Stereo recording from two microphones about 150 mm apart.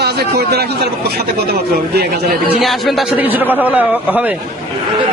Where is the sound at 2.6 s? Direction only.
Centre (ahead or behind).